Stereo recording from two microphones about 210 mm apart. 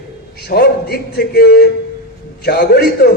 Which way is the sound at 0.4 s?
50° left (ahead or behind).